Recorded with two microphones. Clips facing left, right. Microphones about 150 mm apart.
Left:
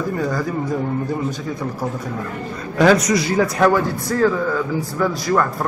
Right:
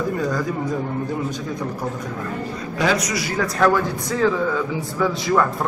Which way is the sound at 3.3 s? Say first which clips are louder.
Left 1 dB; 15° left (ahead or behind).